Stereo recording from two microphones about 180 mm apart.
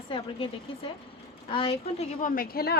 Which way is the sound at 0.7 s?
30° left (ahead or behind).